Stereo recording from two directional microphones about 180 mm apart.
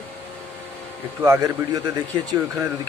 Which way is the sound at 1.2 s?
20° right (ahead or behind).